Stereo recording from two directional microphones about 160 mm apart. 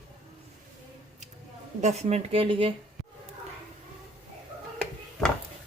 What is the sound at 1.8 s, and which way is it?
Speech, 45° right (ahead or behind).